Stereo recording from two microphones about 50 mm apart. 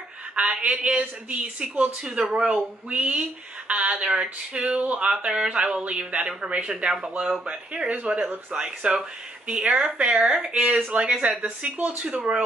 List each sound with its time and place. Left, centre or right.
0.4 s speech: right
2.0 s speech: centre
5.1 s speech: centre
8.2 s speech: right
8.5 s speech: centre